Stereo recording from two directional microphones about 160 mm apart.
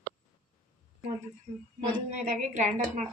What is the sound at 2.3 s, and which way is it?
Speech, 50° right (ahead or behind).